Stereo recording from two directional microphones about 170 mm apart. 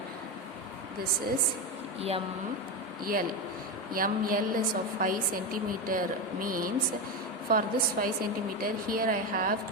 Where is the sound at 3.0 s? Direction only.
55° right (ahead or behind).